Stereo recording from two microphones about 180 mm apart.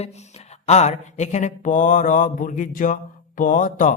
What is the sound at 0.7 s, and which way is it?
Mantra, 40° left (ahead or behind).